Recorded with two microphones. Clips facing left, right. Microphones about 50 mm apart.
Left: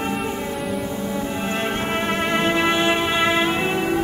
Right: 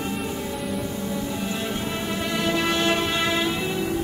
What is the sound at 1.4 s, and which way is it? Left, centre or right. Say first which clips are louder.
Music: left 4 dB; left.